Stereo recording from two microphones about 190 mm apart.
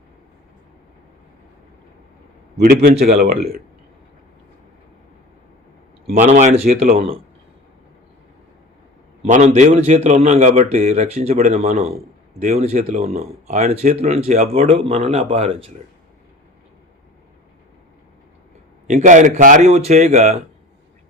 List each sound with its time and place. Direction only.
3.2 s speech: 50° right (ahead or behind)
6.1 s a man's voice: 40° right (ahead or behind)
9.2 s a man's voice: 35° right (ahead or behind)
18.9 s a man's voice: 40° right (ahead or behind)